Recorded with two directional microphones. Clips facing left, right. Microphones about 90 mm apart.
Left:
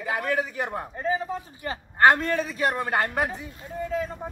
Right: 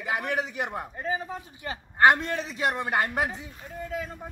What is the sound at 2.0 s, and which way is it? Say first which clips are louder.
A man's voice: left 2 dB; 20° right (ahead or behind).